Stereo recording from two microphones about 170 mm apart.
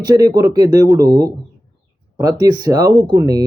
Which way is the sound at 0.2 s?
20° right (ahead or behind).